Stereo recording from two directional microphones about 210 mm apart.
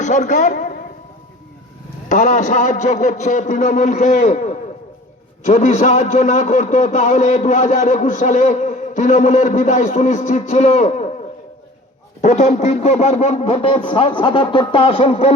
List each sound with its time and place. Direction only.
0.0 s a man's voice: 35° left (ahead or behind)
2.0 s a man's voice: 35° left (ahead or behind)
12.2 s speech: 35° left (ahead or behind)